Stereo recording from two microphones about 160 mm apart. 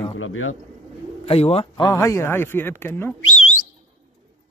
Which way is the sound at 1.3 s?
40° left (ahead or behind).